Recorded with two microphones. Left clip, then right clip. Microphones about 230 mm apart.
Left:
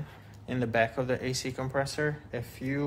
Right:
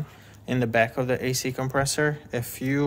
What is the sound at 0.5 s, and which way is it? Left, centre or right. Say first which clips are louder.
Speech: right 5 dB; right.